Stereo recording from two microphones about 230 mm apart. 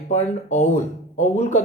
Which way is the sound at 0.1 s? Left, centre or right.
Left.